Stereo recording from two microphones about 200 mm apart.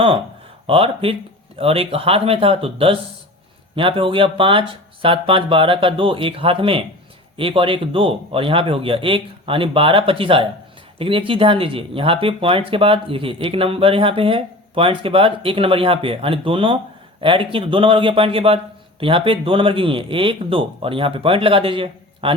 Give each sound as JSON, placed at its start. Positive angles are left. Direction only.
{"t": 0.7, "sound": "speech", "side_deg": -25}